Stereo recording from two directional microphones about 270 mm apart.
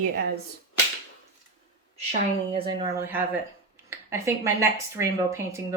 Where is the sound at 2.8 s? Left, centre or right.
Centre.